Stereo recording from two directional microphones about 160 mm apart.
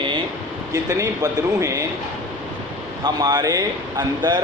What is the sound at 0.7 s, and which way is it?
Speech, 20° right (ahead or behind).